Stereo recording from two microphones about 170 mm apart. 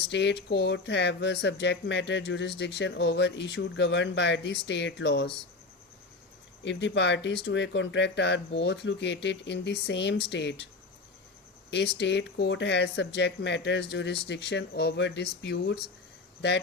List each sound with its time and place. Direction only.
0.1 s speech: 90° left
6.7 s speech: 90° left
11.7 s speech: 90° left